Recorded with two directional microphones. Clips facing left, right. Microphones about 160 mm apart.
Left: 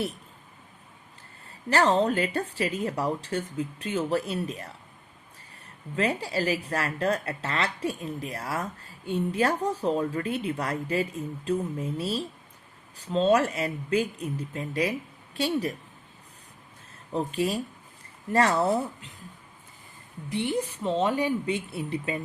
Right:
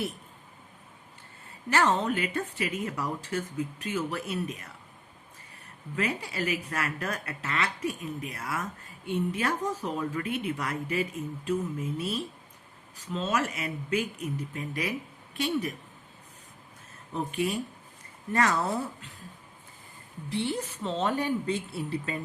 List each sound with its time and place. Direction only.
1.7 s speech: 35° left (ahead or behind)
6.0 s speech: 30° left (ahead or behind)
17.1 s speech: 35° left (ahead or behind)
20.3 s speech: 15° left (ahead or behind)